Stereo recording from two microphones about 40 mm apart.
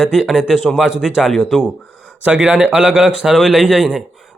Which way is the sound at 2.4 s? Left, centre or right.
Right.